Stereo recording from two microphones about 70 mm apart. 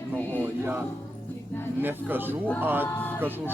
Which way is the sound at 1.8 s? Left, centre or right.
Right.